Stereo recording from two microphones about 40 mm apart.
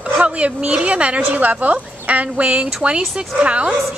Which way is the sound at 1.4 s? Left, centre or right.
Right.